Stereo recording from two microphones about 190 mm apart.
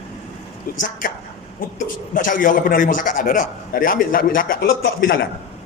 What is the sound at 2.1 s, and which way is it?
A man's voice, 45° left (ahead or behind).